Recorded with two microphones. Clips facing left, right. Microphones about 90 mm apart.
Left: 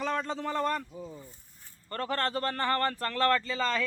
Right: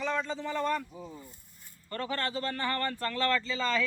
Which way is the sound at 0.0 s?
50° left (ahead or behind).